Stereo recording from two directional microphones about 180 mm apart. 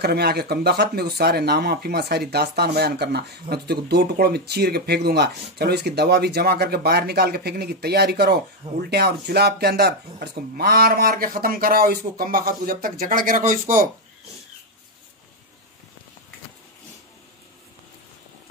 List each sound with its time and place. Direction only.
0.0 s speech: 60° right (ahead or behind)